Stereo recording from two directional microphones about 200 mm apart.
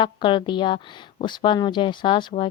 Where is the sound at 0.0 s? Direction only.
25° left (ahead or behind).